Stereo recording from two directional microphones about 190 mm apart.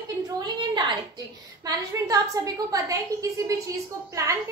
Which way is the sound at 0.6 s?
25° right (ahead or behind).